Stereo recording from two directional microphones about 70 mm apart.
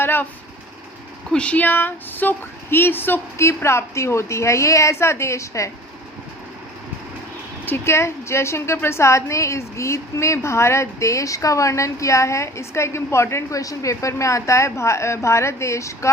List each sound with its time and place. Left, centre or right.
0.0 s vehicle: left
1.3 s speech: centre; by 5.7 s left
7.9 s a woman's voice: left
13.6 s a woman's voice: left